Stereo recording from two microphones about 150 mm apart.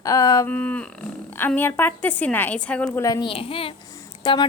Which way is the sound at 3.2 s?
40° left (ahead or behind).